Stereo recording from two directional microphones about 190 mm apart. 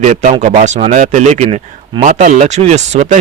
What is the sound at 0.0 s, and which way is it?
Speech, 40° right (ahead or behind).